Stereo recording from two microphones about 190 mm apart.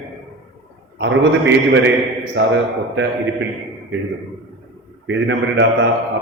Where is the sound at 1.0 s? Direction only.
70° right (ahead or behind).